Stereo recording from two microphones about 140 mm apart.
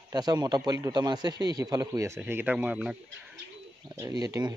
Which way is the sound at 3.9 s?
25° right (ahead or behind).